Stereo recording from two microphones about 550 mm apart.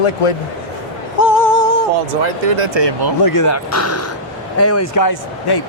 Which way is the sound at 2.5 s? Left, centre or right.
Right.